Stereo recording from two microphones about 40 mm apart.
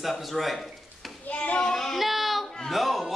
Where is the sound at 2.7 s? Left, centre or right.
Centre.